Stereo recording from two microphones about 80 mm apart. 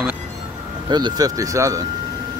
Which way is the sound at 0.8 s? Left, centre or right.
Right.